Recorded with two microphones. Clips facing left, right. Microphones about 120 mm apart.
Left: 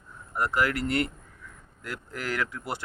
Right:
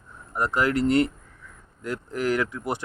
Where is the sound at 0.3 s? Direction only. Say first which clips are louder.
Right 3 dB; 20° right (ahead or behind).